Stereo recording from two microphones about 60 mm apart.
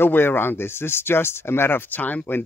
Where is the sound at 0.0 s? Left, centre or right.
Left.